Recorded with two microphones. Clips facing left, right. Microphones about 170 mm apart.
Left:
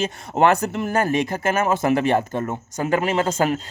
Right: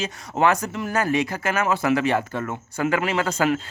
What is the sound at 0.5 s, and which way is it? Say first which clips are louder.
Speech: left 4 dB; 65° left (ahead or behind).